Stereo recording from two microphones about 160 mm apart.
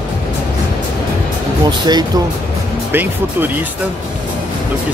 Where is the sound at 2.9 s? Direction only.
10° right (ahead or behind).